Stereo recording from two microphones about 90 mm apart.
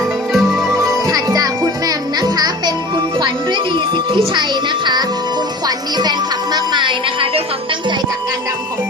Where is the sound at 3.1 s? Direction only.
60° right (ahead or behind).